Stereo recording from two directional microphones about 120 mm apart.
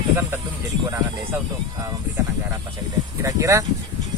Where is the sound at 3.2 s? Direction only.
25° right (ahead or behind).